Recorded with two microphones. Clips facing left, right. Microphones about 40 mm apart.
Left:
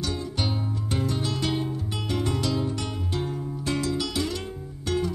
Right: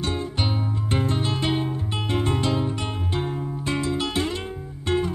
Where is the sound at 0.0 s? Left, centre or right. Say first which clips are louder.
Right 3 dB; right.